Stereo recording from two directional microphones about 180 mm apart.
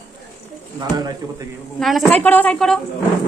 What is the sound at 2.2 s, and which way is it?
Speech, 10° left (ahead or behind).